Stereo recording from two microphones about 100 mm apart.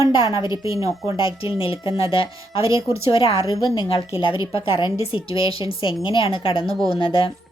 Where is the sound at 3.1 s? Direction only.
65° left (ahead or behind).